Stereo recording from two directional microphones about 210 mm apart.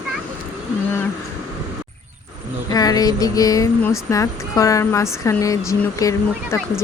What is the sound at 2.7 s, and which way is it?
Speech, 15° left (ahead or behind).